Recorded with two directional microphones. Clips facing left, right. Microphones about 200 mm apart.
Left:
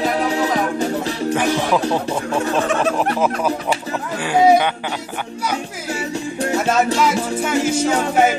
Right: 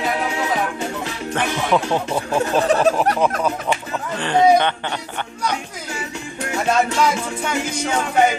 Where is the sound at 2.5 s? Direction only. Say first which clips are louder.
Right 4 dB; 35° right (ahead or behind).